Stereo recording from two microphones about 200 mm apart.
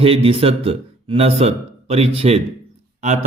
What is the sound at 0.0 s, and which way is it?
A man's voice, 30° right (ahead or behind).